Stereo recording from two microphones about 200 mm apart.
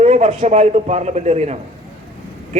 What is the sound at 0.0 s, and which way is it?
A man's voice, 35° right (ahead or behind).